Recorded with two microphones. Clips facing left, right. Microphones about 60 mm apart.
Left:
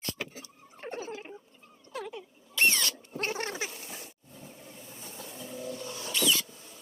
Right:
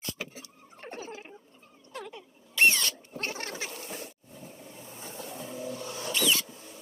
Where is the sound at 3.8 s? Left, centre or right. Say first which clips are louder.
Right 5 dB; right.